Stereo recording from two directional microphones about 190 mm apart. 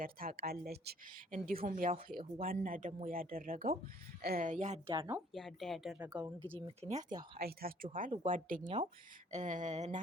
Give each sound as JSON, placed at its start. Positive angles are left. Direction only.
{"t": 0.0, "sound": "speech", "side_deg": -50}
{"t": 5.3, "sound": "speech", "side_deg": 0}
{"t": 6.7, "sound": "a sound", "side_deg": -35}
{"t": 7.3, "sound": "speech", "side_deg": -50}
{"t": 8.6, "sound": "speech", "side_deg": -25}
{"t": 9.3, "sound": "a sound", "side_deg": -40}